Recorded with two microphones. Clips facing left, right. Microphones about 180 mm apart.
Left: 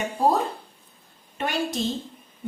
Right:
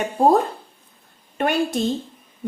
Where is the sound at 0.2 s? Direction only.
50° right (ahead or behind).